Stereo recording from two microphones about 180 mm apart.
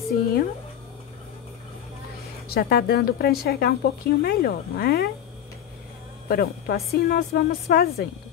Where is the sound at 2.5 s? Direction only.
60° left (ahead or behind).